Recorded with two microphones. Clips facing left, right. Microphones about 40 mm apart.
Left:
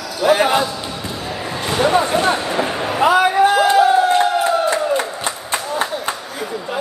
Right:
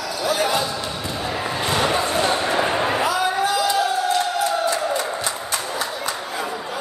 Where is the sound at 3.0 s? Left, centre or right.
Left.